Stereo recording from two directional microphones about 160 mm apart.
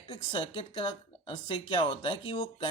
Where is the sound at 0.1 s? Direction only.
30° left (ahead or behind).